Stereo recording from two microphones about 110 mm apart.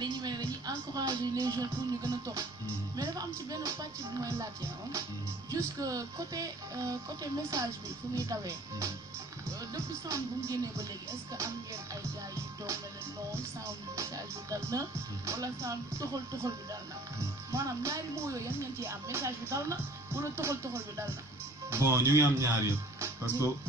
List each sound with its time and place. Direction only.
0.0 s speech: 40° right (ahead or behind)
5.5 s speech: 35° right (ahead or behind)
8.3 s speech: 30° right (ahead or behind)
10.0 s speech: 30° right (ahead or behind)
13.9 s speech: 30° right (ahead or behind)